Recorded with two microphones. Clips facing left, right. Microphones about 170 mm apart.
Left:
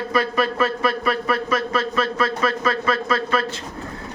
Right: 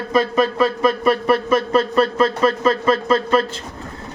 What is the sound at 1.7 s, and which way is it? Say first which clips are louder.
A man's voice: right 6 dB; 30° right (ahead or behind).